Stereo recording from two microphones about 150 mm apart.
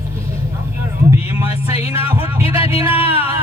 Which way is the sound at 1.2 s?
40° left (ahead or behind).